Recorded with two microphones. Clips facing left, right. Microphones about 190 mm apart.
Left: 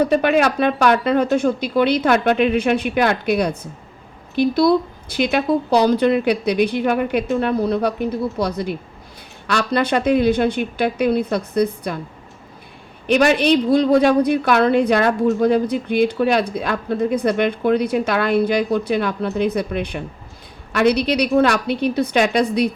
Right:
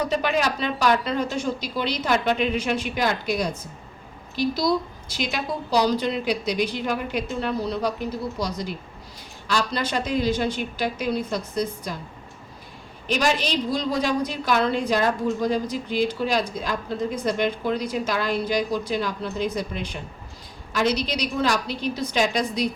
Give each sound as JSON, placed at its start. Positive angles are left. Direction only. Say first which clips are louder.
{"t": 0.0, "sound": "a woman's voice", "louder": "left 7 dB", "side_deg": 60}
{"t": 13.1, "sound": "a woman's voice", "louder": "left 9 dB", "side_deg": 60}